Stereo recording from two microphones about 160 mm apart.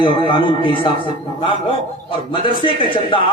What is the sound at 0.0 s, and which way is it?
Speech, 30° left (ahead or behind).